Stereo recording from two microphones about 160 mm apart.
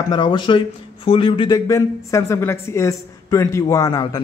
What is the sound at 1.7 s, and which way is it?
Speech, 20° left (ahead or behind).